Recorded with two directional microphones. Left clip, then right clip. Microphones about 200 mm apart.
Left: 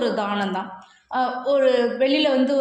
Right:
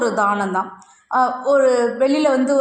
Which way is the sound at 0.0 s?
10° right (ahead or behind).